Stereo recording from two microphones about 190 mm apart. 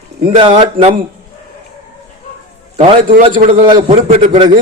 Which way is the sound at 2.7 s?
30° right (ahead or behind).